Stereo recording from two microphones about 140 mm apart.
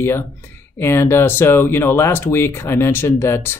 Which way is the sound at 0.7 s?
15° left (ahead or behind).